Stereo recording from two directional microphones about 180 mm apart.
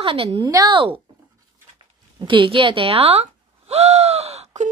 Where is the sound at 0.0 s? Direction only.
30° right (ahead or behind).